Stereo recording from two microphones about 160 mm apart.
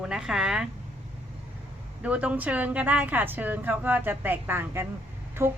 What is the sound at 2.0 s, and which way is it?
A woman's voice, 10° right (ahead or behind).